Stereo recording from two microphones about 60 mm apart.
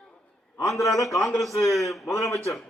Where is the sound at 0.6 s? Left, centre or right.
Left.